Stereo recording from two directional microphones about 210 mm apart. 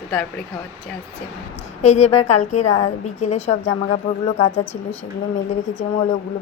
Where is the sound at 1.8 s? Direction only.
30° left (ahead or behind).